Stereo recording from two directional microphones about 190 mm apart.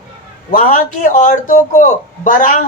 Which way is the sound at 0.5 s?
45° left (ahead or behind).